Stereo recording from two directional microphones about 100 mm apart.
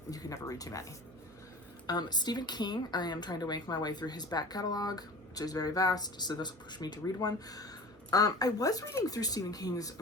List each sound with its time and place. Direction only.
0.1 s speech: 35° left (ahead or behind)
1.9 s speech: 45° left (ahead or behind)